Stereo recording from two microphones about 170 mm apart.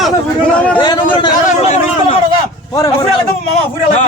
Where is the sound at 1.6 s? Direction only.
40° left (ahead or behind).